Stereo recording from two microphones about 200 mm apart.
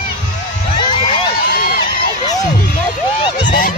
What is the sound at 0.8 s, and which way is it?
Crowd, 25° left (ahead or behind).